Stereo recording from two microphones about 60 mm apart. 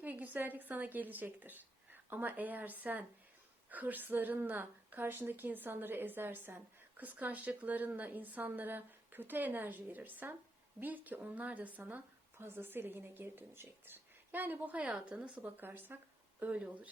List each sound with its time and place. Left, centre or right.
0.0 s a woman's voice: right